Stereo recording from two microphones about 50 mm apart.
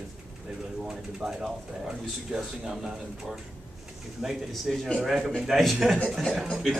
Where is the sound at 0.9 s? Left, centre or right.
Centre.